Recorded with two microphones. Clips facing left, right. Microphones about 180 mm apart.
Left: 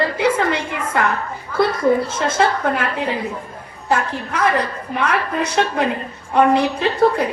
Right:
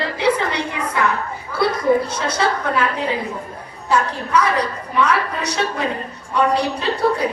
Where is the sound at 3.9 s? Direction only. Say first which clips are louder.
Right 1 dB; 50° left (ahead or behind).